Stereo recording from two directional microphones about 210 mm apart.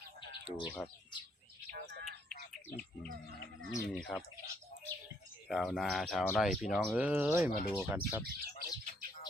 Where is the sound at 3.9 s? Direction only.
Centre (ahead or behind).